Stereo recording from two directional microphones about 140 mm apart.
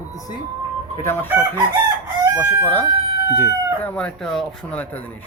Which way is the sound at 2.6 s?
15° left (ahead or behind).